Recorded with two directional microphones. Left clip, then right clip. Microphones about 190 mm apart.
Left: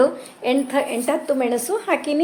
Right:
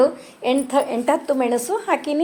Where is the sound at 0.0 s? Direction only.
20° right (ahead or behind).